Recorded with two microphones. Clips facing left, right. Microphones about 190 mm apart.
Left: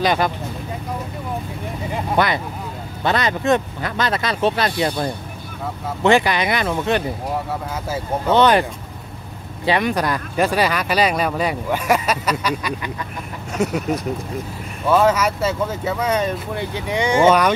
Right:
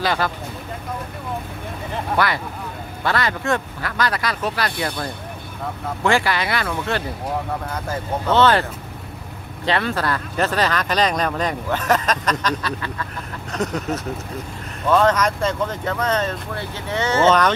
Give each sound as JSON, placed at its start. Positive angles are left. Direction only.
{"t": 0.0, "sound": "speech", "side_deg": 20}
{"t": 2.1, "sound": "speech", "side_deg": 20}
{"t": 9.7, "sound": "speech", "side_deg": 15}